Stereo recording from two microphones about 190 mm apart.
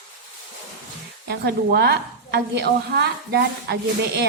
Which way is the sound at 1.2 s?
60° right (ahead or behind).